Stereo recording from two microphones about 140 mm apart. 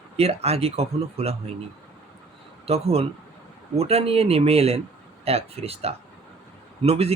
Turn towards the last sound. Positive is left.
turn(degrees=-45)  # may be behind; listen again after turning